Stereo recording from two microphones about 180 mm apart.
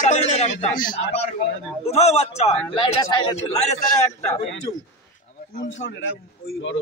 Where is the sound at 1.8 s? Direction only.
35° left (ahead or behind).